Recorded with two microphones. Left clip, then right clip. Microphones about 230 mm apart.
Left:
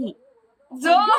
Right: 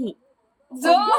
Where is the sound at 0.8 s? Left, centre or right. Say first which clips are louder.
Left 1 dB; centre.